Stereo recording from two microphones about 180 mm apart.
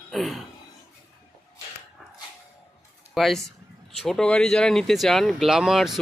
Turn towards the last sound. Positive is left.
turn(degrees=0)  # may be behind; listen again after turning